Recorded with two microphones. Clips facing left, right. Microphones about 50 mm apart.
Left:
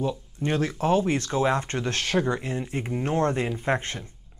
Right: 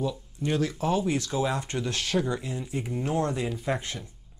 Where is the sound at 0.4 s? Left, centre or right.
Left.